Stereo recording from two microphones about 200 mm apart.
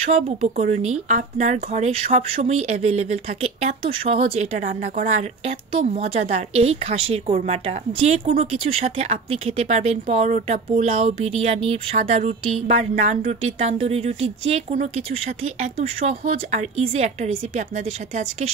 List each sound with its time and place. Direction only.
0.0 s speech: 35° right (ahead or behind)